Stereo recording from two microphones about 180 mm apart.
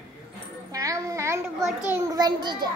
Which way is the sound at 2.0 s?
20° right (ahead or behind).